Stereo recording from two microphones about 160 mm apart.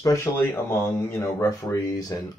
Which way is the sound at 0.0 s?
20° left (ahead or behind).